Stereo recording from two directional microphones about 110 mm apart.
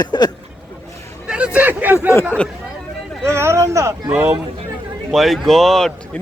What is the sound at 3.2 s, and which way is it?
Speech, 25° right (ahead or behind).